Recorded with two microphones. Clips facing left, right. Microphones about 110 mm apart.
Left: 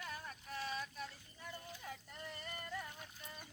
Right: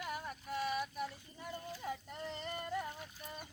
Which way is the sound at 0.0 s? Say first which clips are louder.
Right 6 dB; 15° right (ahead or behind).